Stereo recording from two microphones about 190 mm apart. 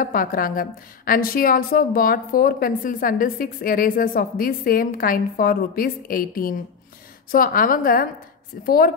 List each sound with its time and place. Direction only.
0.0 s a woman's voice: 50° left (ahead or behind)